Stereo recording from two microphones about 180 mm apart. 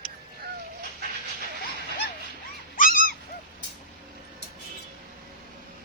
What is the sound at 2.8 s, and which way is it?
Dog, 50° left (ahead or behind).